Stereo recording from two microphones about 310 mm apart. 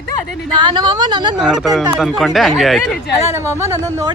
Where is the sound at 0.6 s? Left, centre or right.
Centre.